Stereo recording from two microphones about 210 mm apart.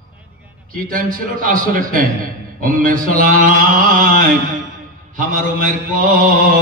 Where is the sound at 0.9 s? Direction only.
40° right (ahead or behind).